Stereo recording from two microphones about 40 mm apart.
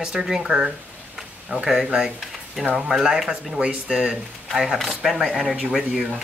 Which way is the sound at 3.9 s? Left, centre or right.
Right.